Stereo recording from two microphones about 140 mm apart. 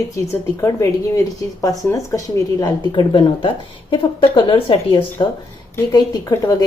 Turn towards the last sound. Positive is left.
turn(degrees=25)  # may be behind; listen again after turning